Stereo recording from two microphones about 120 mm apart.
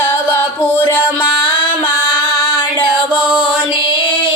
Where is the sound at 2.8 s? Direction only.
45° left (ahead or behind).